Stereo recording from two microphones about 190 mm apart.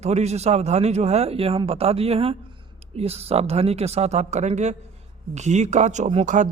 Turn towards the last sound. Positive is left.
turn(degrees=-40)  # may be behind; listen again after turning